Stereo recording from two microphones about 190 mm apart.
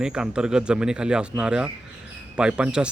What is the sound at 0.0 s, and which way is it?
Speech, 5° right (ahead or behind).